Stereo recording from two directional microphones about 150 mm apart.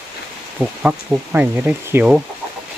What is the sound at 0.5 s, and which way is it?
Speech, 10° right (ahead or behind).